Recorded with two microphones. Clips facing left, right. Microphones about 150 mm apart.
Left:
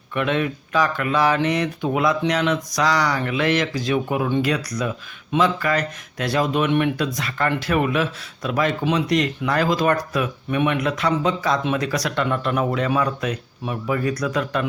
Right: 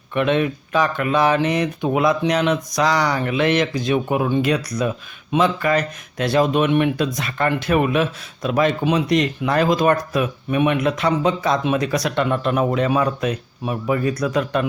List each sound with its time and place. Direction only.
0.1 s speech: 20° right (ahead or behind)